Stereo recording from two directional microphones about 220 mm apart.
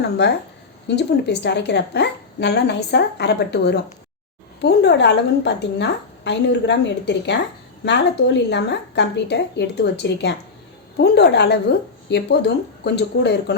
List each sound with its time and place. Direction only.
0.2 s a woman's voice: 50° left (ahead or behind)